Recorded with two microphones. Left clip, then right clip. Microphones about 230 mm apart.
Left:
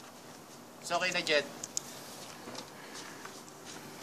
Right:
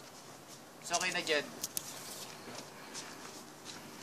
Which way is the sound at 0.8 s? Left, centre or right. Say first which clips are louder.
Left 3 dB; left.